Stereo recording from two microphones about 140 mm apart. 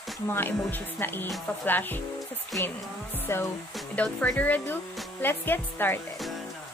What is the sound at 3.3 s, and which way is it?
Speech, 20° left (ahead or behind).